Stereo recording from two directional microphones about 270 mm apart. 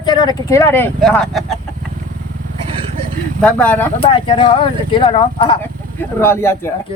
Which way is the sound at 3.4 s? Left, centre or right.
Centre.